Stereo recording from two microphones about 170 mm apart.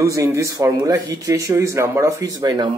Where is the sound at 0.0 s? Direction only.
20° right (ahead or behind).